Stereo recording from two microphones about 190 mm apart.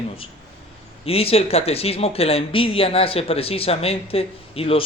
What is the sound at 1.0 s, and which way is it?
Speech, 30° left (ahead or behind).